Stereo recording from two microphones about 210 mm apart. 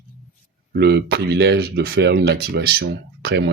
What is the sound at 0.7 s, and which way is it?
Speech, 50° right (ahead or behind).